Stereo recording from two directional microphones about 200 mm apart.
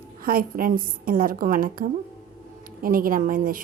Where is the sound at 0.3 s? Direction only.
45° right (ahead or behind).